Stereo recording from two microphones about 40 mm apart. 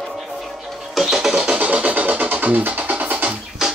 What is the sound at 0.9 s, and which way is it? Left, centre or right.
Music, centre.